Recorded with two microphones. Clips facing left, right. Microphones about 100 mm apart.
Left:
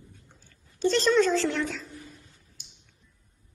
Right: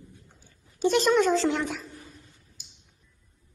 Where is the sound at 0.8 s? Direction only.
15° right (ahead or behind).